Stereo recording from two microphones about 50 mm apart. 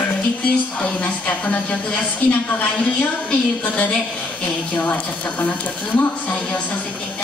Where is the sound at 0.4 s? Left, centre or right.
Left.